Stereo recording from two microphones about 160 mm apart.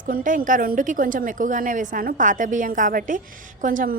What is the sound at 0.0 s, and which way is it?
A woman's voice, 55° right (ahead or behind).